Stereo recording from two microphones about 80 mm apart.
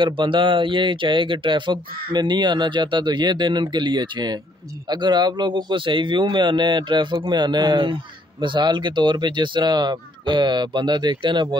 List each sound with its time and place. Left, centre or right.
0.0 s a man's voice: right